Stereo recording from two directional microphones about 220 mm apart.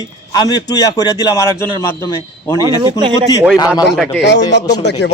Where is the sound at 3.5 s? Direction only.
20° left (ahead or behind).